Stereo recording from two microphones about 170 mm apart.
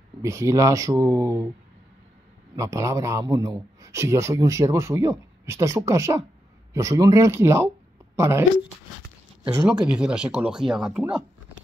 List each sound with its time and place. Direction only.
0.2 s a man's voice: 15° right (ahead or behind)
2.5 s a man's voice: 15° right (ahead or behind)